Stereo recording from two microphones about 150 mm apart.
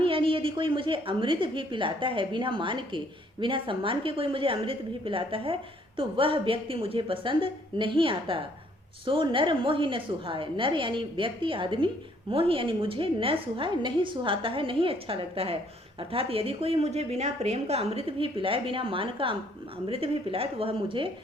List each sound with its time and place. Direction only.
0.0 s a woman's voice: 35° right (ahead or behind)